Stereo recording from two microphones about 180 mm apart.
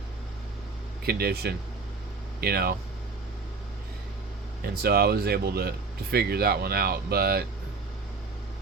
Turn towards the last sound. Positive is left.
turn(degrees=-60)  # may be behind; listen again after turning